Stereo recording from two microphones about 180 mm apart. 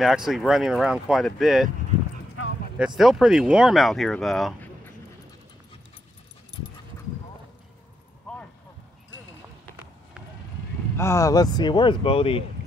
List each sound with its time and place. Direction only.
0.0 s speech: centre (ahead or behind)
3.0 s speech: centre (ahead or behind)
11.0 s speech: 15° left (ahead or behind); by 12.4 s 30° left (ahead or behind)